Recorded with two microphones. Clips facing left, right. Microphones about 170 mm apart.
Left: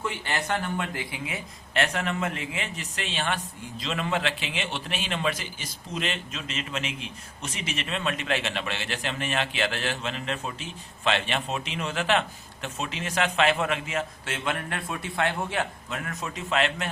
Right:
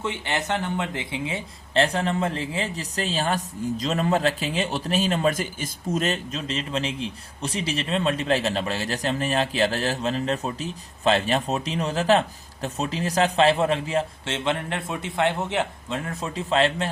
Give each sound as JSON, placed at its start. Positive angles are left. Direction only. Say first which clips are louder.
{"t": 0.0, "sound": "speech", "louder": "right 3 dB", "side_deg": -20}